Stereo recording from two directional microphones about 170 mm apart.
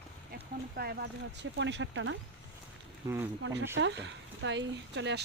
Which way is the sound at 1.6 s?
90° right.